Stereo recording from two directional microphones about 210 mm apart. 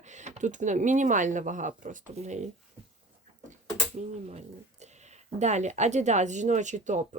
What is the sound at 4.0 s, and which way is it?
Speech, 35° right (ahead or behind).